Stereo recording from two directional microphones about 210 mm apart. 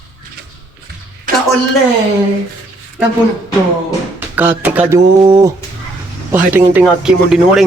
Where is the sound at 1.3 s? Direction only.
40° right (ahead or behind).